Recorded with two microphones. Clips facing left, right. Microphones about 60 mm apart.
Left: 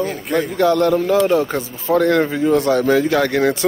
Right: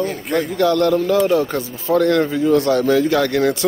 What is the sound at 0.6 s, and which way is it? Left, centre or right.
Speech, left.